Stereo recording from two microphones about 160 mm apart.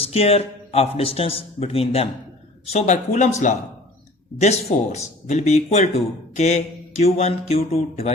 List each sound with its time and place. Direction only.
0.0 s a man's voice: 40° left (ahead or behind)